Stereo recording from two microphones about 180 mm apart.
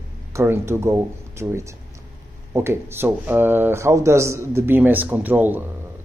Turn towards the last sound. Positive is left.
turn(degrees=-10)  # may be behind; listen again after turning